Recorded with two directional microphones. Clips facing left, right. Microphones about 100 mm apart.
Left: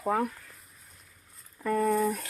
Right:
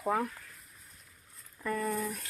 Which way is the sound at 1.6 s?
45° left (ahead or behind).